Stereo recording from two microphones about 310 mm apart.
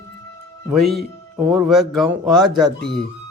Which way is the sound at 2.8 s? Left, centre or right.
Left.